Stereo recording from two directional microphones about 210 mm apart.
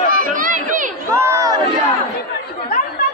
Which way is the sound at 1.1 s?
15° right (ahead or behind).